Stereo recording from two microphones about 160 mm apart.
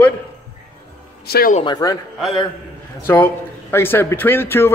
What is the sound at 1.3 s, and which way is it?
Speech, 75° left (ahead or behind).